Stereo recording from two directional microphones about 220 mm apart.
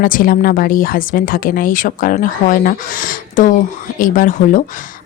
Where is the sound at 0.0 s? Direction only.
40° left (ahead or behind).